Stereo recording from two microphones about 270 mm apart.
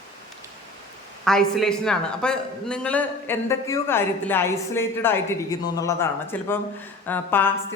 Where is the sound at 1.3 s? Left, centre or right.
Centre.